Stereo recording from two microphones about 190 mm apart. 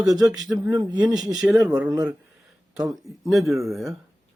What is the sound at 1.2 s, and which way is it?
Speech, 5° right (ahead or behind).